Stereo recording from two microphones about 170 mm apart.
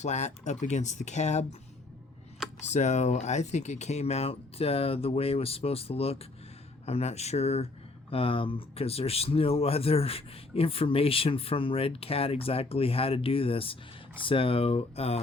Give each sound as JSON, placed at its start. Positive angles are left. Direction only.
{"t": 0.0, "sound": "speech", "side_deg": 40}
{"t": 2.6, "sound": "speech", "side_deg": 40}